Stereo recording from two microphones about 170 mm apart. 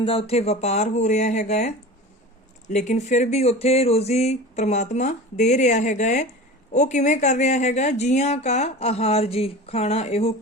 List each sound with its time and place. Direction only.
0.0 s speech: 35° left (ahead or behind)